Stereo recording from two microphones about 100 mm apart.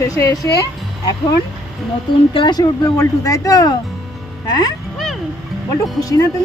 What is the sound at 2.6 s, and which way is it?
Speech, 35° left (ahead or behind).